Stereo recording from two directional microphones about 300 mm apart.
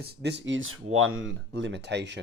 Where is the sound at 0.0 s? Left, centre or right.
Right.